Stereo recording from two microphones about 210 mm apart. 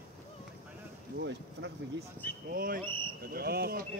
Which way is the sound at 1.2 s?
55° right (ahead or behind).